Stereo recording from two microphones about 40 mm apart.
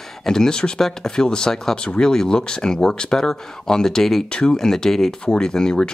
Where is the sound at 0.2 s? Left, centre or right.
Centre.